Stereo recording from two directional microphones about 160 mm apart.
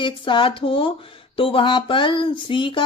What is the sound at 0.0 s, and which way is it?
Speech, 30° left (ahead or behind).